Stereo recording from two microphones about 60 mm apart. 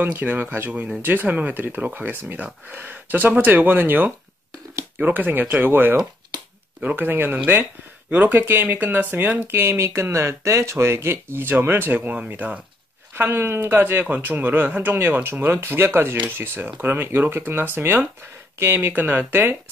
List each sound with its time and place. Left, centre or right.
0.0 s speech: right
13.1 s speech: right
14.0 s speech: right